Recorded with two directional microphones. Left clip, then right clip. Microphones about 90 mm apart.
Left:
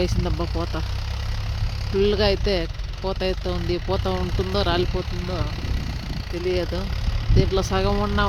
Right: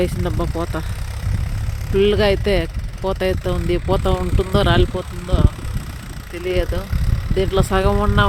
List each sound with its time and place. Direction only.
0.0 s speech: 45° right (ahead or behind)
1.9 s speech: 40° right (ahead or behind)